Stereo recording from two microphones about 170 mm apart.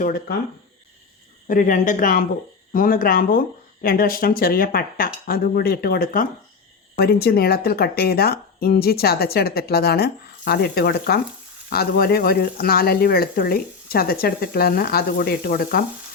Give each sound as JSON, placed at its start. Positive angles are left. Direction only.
{"t": 0.0, "sound": "speech", "side_deg": 60}
{"t": 1.5, "sound": "a woman's voice", "side_deg": 50}